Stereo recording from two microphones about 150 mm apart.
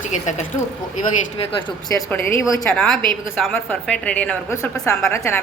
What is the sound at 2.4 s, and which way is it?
A woman's voice, 5° left (ahead or behind).